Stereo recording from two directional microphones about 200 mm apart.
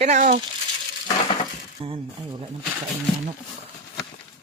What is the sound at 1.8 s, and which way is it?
Speech, 30° right (ahead or behind).